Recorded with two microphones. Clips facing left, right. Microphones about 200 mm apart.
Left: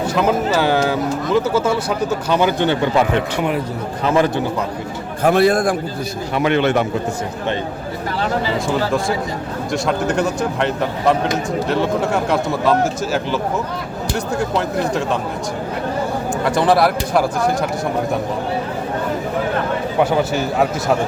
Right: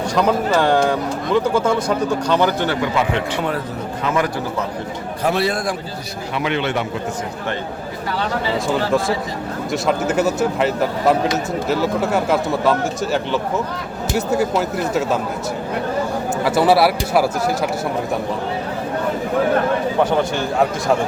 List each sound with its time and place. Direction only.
0.1 s speech: 5° left (ahead or behind)
4.0 s a man's voice: 30° left (ahead or behind)
5.2 s a man's voice: 50° left (ahead or behind)
8.6 s speech: centre (ahead or behind)
16.4 s speech: 5° right (ahead or behind)
20.0 s speech: 5° left (ahead or behind)